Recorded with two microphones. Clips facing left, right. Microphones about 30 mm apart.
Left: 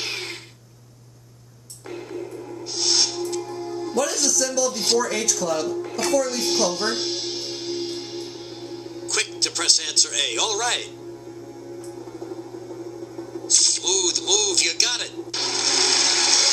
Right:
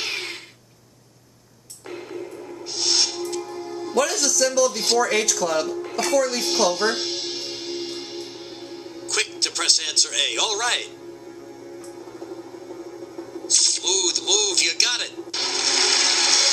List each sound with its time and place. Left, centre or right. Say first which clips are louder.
0.0 s throat clearing: right 1 dB; centre
2.7 s music: even; centre
3.9 s speech: right 2 dB; right
4.6 s speech: right 1 dB; centre
5.5 s speech: right 1 dB; right
5.8 s speech: right 1 dB; centre
6.4 s music: right 2 dB; centre
9.0 s a man's voice: right 1 dB; centre
13.3 s a sound: even; centre